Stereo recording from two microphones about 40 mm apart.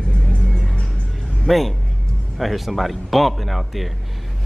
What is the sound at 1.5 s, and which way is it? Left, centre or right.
A man's voice, centre.